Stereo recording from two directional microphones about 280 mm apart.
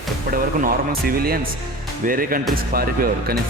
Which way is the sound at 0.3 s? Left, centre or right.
Right.